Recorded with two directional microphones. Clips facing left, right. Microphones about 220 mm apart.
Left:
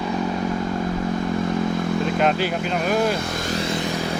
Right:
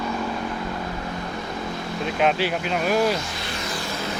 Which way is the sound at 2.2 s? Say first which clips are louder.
Left 1 dB; centre (ahead or behind).